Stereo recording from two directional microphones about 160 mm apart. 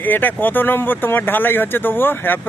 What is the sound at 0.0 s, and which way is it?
Speech, 10° left (ahead or behind).